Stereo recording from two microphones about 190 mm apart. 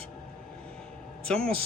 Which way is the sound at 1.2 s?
5° left (ahead or behind).